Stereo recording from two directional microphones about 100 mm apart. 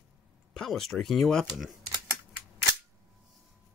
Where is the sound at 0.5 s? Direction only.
Centre (ahead or behind).